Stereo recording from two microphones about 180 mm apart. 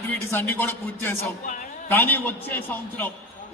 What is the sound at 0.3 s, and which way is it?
A man's voice, 15° left (ahead or behind).